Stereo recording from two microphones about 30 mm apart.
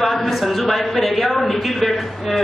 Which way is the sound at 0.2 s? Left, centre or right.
Centre.